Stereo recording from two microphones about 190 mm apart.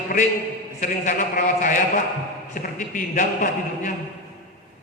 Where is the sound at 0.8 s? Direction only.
40° left (ahead or behind).